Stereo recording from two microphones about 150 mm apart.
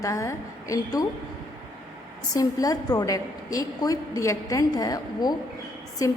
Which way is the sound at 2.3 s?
25° left (ahead or behind).